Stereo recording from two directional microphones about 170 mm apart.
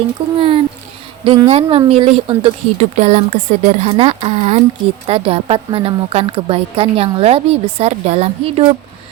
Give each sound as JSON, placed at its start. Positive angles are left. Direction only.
{"t": 0.3, "sound": "a woman's voice", "side_deg": -35}